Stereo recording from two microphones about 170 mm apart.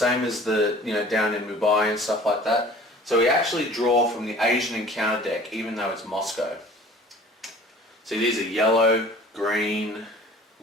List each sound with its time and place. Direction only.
0.0 s speech: centre (ahead or behind)
7.4 s tick-tock: centre (ahead or behind)
8.0 s speech: centre (ahead or behind)